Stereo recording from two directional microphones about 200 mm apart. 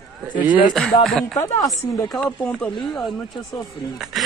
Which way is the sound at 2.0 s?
5° left (ahead or behind).